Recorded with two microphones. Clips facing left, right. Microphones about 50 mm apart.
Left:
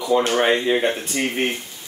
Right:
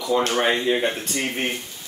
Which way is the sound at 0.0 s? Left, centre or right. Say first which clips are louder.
Left 2 dB; centre.